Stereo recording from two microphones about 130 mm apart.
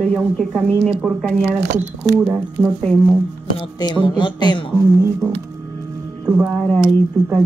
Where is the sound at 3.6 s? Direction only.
35° left (ahead or behind).